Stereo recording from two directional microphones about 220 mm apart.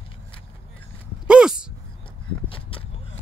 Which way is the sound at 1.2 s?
5° right (ahead or behind).